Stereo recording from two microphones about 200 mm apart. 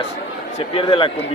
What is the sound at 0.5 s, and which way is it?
Speech, 30° left (ahead or behind).